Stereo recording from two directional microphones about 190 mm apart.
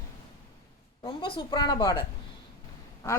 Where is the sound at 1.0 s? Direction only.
25° left (ahead or behind).